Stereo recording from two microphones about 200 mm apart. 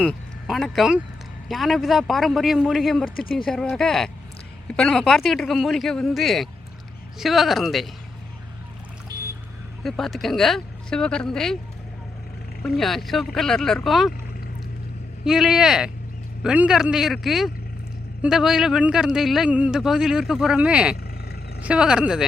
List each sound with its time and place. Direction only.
0.0 s speech: centre (ahead or behind)
9.1 s a sound: 20° right (ahead or behind)
9.8 s speech: centre (ahead or behind)
12.6 s speech: centre (ahead or behind)
15.2 s speech: 5° right (ahead or behind)